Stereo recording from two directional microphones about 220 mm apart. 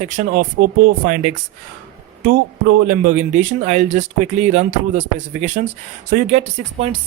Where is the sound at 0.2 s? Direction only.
40° right (ahead or behind).